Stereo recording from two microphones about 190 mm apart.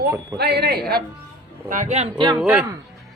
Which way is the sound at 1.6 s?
40° right (ahead or behind).